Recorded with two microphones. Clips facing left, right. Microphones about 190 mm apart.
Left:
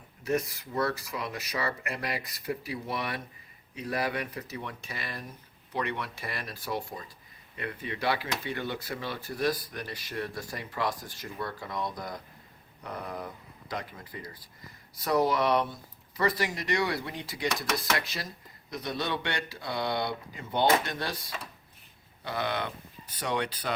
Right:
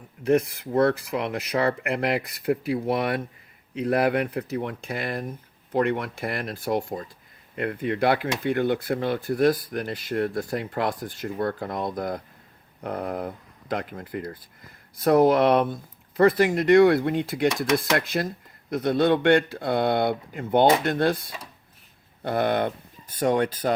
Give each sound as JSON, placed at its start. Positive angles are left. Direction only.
{"t": 0.3, "sound": "speech", "side_deg": -55}